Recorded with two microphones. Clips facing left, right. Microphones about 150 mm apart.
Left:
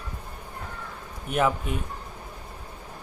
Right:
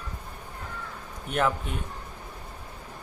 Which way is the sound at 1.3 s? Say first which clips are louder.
Left 2 dB; 5° left (ahead or behind).